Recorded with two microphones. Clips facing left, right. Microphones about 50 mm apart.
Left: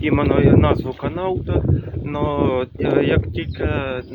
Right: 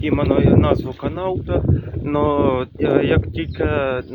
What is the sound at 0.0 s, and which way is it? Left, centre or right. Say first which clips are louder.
Speech: left 1 dB; centre.